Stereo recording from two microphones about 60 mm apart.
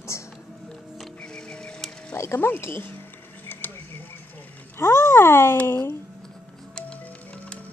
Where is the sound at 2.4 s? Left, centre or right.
Left.